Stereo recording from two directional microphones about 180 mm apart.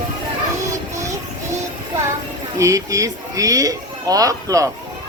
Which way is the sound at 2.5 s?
15° right (ahead or behind).